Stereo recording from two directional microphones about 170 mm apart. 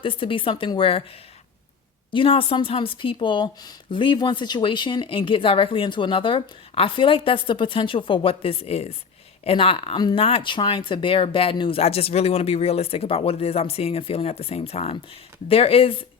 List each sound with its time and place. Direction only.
0.0 s a woman's voice: 30° left (ahead or behind)
2.0 s a woman's voice: 30° left (ahead or behind)